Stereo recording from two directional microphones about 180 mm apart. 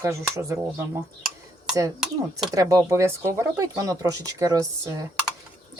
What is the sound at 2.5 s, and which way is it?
Speech, 15° right (ahead or behind).